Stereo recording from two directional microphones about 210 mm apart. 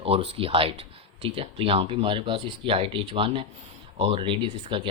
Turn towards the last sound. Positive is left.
turn(degrees=-25)  # may be behind; listen again after turning